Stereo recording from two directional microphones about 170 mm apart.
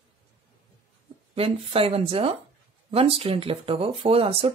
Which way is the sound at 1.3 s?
35° right (ahead or behind).